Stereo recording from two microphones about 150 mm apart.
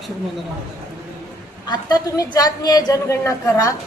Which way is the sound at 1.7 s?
25° left (ahead or behind).